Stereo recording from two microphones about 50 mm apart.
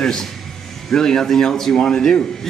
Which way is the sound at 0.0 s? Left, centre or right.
Centre.